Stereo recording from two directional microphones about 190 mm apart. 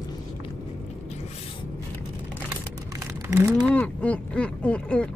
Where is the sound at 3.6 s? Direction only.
5° left (ahead or behind).